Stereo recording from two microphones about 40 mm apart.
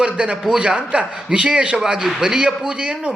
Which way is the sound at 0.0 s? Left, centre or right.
Right.